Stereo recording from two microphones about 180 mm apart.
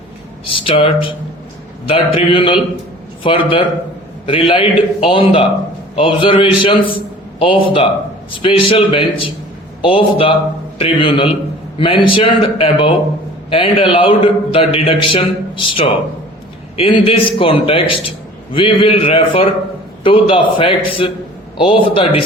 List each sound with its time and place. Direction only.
0.4 s a man's voice: 30° left (ahead or behind)